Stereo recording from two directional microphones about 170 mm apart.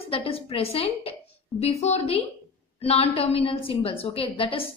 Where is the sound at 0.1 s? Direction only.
35° left (ahead or behind).